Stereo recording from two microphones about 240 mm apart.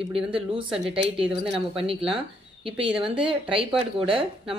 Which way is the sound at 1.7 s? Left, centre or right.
Right.